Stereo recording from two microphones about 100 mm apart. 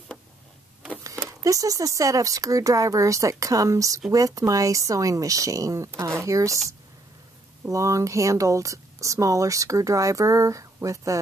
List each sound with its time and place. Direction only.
1.4 s speech: 35° right (ahead or behind)
7.6 s speech: 30° right (ahead or behind)